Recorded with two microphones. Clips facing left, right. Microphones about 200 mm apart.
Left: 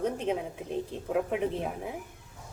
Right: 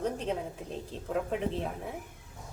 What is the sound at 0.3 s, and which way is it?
Speech, 10° left (ahead or behind).